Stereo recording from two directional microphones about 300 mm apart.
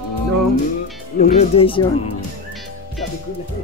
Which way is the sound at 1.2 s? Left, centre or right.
Left.